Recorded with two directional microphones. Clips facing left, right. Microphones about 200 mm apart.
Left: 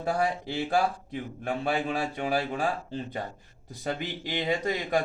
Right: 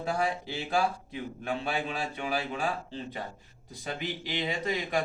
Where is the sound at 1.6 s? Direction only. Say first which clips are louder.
Left 4 dB; 45° left (ahead or behind).